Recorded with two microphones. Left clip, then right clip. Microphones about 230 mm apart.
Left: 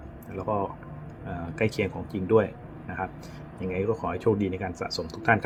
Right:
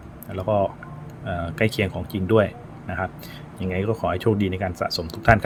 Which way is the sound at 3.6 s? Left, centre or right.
Right.